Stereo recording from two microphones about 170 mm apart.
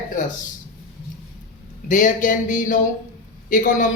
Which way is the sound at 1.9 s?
50° left (ahead or behind).